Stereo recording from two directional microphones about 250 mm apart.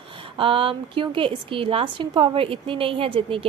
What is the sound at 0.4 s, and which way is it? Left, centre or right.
A woman's voice, right.